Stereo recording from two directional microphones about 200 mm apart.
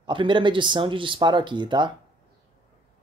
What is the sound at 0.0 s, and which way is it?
Speech, 25° right (ahead or behind).